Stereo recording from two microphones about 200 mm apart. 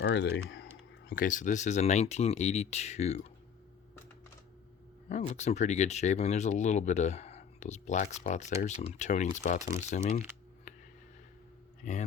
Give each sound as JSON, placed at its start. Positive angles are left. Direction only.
{"t": 0.0, "sound": "speech", "side_deg": 60}
{"t": 1.1, "sound": "speech", "side_deg": 40}
{"t": 5.0, "sound": "speech", "side_deg": 35}
{"t": 11.8, "sound": "a man's voice", "side_deg": 40}